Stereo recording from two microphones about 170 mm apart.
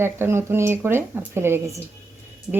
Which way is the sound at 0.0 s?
15° right (ahead or behind).